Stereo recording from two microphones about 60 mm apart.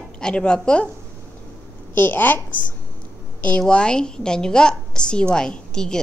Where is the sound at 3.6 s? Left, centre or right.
Centre.